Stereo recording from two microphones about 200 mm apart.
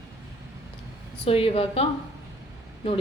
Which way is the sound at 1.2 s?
30° left (ahead or behind).